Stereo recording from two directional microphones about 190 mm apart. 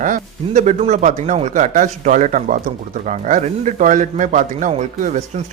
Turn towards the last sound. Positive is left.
turn(degrees=-40)  # may be behind; listen again after turning